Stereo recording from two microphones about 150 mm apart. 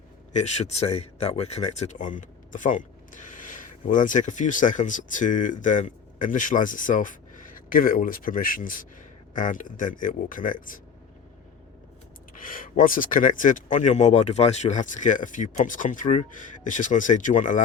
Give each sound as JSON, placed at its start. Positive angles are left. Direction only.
{"t": 0.3, "sound": "speech", "side_deg": 50}
{"t": 12.4, "sound": "speech", "side_deg": 70}